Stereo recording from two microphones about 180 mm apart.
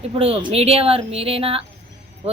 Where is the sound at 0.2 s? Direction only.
35° right (ahead or behind).